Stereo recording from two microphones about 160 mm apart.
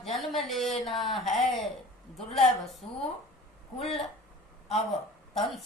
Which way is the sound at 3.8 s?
40° left (ahead or behind).